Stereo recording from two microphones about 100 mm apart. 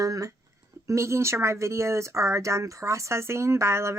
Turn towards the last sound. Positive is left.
turn(degrees=-30)  # may be behind; listen again after turning